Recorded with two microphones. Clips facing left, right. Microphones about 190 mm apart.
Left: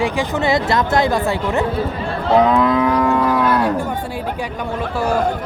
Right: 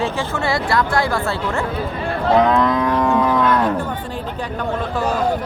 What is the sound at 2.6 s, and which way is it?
Livestock, 5° left (ahead or behind).